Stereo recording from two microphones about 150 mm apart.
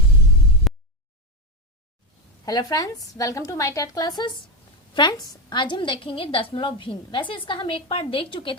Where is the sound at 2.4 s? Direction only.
25° left (ahead or behind).